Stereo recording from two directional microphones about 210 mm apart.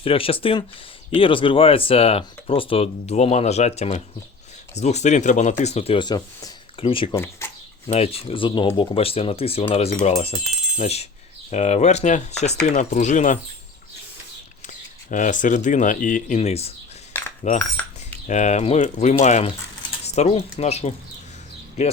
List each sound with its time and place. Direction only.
0.0 s speech: 25° left (ahead or behind)
7.2 s speech: 10° left (ahead or behind)
7.9 s speech: 30° left (ahead or behind)
15.1 s speech: 40° left (ahead or behind)